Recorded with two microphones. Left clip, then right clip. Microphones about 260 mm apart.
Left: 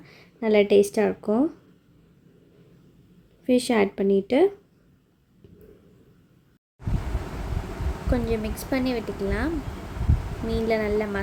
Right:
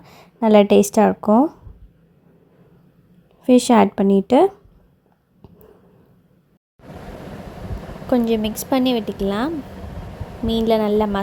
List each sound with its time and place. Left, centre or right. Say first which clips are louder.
0.0 s speech: right 8 dB; right
3.4 s a woman's voice: right 8 dB; right
8.1 s a woman's voice: right 8 dB; right
10.5 s a woman's voice: right 6 dB; right